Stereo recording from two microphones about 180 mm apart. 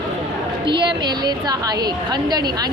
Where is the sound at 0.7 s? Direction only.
25° right (ahead or behind).